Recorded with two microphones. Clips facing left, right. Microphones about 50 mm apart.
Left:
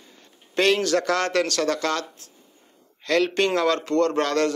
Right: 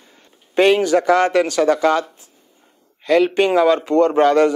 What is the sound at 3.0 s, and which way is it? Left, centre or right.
Speech, centre.